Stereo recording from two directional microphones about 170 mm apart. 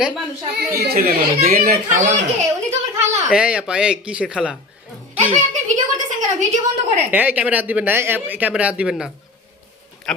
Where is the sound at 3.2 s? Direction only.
5° right (ahead or behind).